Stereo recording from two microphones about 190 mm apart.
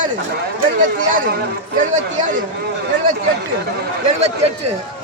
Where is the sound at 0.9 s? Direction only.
45° right (ahead or behind).